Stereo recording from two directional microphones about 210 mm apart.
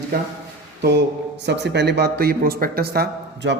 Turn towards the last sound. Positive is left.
turn(degrees=-50)  # may be behind; listen again after turning